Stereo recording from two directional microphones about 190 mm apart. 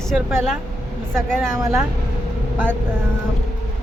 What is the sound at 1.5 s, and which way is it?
Speech, 15° right (ahead or behind).